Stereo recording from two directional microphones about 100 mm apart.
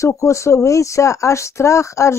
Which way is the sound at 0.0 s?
30° left (ahead or behind).